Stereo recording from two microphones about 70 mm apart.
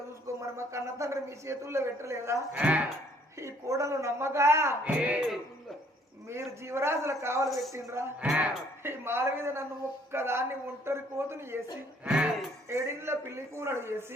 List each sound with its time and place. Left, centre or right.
0.4 s a man's voice: right
2.5 s speech: centre
3.3 s a woman's voice: right
4.8 s music: right
6.2 s a woman's voice: right
8.2 s music: right
8.8 s a man's voice: right
12.0 s speech: centre
12.6 s a woman's voice: right